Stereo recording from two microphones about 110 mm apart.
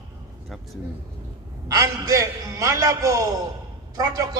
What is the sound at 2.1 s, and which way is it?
A man's voice, 30° right (ahead or behind).